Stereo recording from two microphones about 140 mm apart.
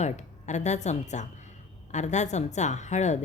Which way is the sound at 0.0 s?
55° left (ahead or behind).